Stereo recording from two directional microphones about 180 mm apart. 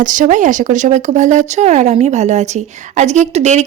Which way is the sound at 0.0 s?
45° right (ahead or behind).